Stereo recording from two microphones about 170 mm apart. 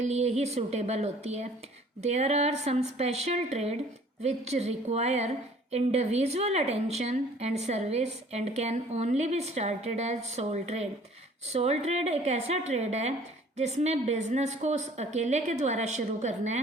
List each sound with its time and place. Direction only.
0.0 s a woman's voice: 40° right (ahead or behind)